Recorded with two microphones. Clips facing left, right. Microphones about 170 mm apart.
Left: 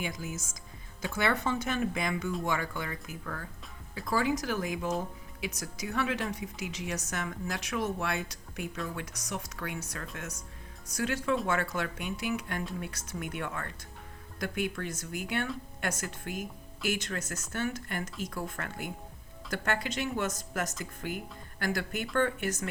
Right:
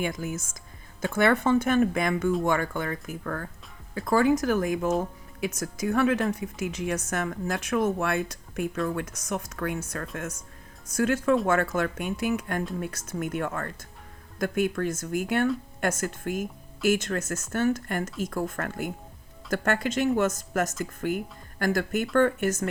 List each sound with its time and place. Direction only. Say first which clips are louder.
0.0 s a woman's voice: right 7 dB; 55° right (ahead or behind)